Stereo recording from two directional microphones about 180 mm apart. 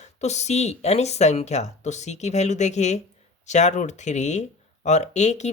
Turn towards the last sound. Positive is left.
turn(degrees=40)  # may be behind; listen again after turning